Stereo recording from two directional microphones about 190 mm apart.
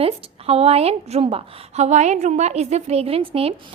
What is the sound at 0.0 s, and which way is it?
A woman's voice, 30° right (ahead or behind).